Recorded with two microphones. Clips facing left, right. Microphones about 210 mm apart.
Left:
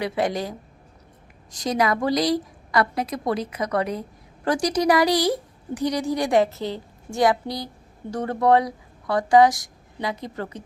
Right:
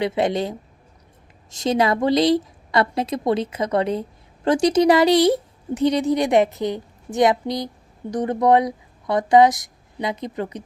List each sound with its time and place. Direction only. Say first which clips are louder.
0.0 s a woman's voice: right 4 dB; 25° right (ahead or behind)